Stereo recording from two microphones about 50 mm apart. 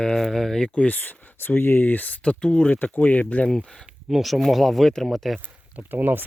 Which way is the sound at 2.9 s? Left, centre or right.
Left.